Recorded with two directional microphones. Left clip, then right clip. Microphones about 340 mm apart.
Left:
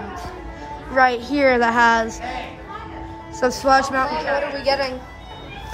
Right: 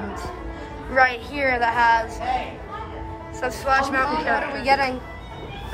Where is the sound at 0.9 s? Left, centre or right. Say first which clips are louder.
Left 2 dB; centre.